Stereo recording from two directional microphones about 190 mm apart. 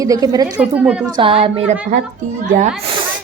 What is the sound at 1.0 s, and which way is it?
Speech, 25° right (ahead or behind).